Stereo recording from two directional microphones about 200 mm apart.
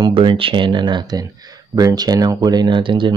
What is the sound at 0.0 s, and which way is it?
Speech, 25° right (ahead or behind).